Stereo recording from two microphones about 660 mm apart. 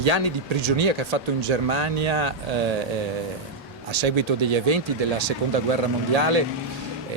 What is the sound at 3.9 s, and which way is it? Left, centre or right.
Speech, right.